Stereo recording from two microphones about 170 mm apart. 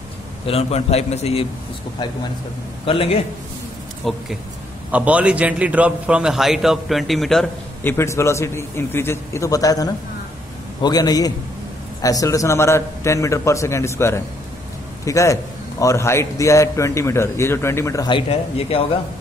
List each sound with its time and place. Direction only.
0.5 s a man's voice: 35° left (ahead or behind)
2.9 s a man's voice: 35° left (ahead or behind)
4.0 s a man's voice: centre (ahead or behind)
8.0 s a man's voice: 15° left (ahead or behind)